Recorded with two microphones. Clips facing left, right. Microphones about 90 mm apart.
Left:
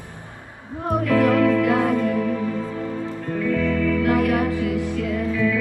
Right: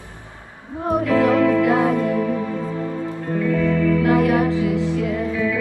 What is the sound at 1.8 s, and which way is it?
Music, 10° right (ahead or behind).